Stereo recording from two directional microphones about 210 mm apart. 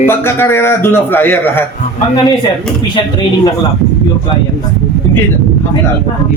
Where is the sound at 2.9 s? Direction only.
20° left (ahead or behind).